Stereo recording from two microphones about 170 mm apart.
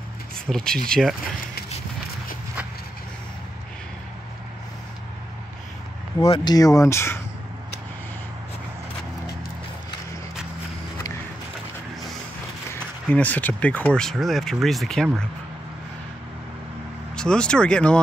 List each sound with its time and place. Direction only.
0.5 s speech: 5° left (ahead or behind)
6.2 s speech: 30° left (ahead or behind)
13.1 s speech: 10° left (ahead or behind)
17.1 s speech: 5° left (ahead or behind)